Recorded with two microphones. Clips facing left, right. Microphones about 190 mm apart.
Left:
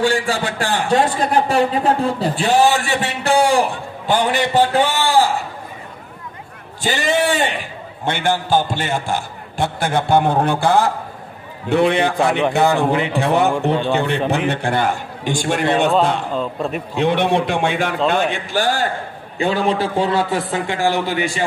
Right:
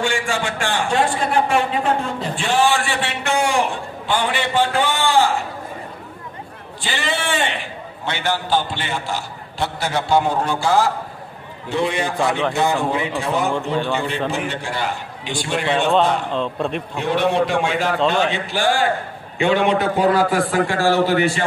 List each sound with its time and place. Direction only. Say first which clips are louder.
0.0 s a man's voice: left 4 dB; 35° left (ahead or behind)
6.8 s a man's voice: left 7 dB; 40° left (ahead or behind)
15.9 s a man's voice: even; centre (ahead or behind)
17.0 s a man's voice: left 2 dB; 60° left (ahead or behind); by 21.5 s 15° left (ahead or behind)